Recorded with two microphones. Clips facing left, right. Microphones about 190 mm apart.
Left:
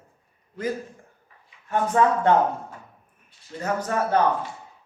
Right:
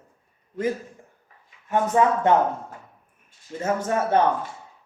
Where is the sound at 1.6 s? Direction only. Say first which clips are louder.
Right 1 dB; 20° right (ahead or behind).